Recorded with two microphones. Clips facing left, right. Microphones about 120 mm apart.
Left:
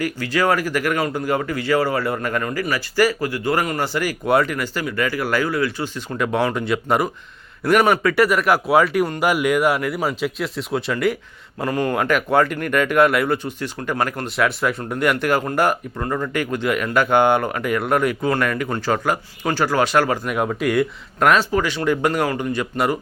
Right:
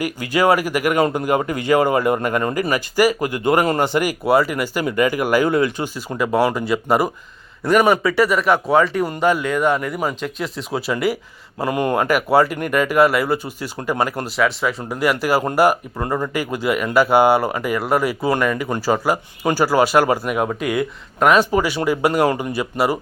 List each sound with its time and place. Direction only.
0.0 s speech: 15° right (ahead or behind)
4.3 s speech: 5° right (ahead or behind)
6.1 s speech: 5° right (ahead or behind)
8.1 s speech: centre (ahead or behind)
11.6 s speech: 15° right (ahead or behind)
11.9 s speech: 5° right (ahead or behind)
21.3 s speech: 10° right (ahead or behind)